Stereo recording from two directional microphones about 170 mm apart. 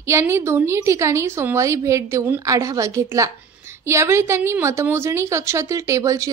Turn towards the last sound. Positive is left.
turn(degrees=-20)  # may be behind; listen again after turning